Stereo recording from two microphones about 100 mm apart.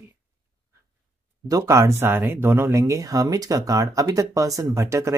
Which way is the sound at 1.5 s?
30° right (ahead or behind).